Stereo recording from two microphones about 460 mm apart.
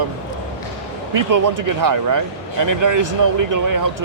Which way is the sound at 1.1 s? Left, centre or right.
Right.